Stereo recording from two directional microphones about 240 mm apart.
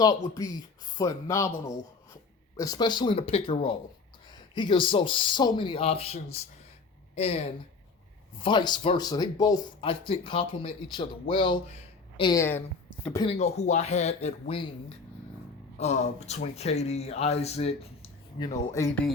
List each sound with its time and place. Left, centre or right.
0.3 s speech: centre
13.2 s speech: left
15.8 s speech: left